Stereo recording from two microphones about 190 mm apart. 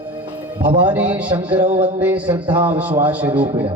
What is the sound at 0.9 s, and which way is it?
Speech, 5° right (ahead or behind).